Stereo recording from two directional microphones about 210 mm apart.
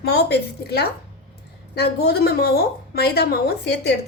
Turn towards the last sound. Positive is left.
turn(degrees=50)  # may be behind; listen again after turning